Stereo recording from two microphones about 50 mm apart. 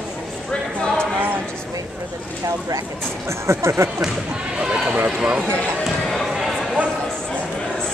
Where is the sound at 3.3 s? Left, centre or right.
Right.